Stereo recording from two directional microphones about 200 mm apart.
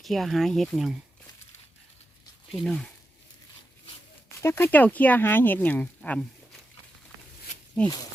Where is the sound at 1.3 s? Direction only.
20° left (ahead or behind).